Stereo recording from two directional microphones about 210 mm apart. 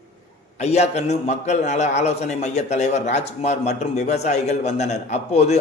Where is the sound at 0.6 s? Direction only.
30° left (ahead or behind).